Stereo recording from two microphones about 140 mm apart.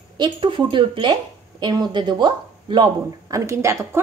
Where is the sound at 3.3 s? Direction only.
20° right (ahead or behind).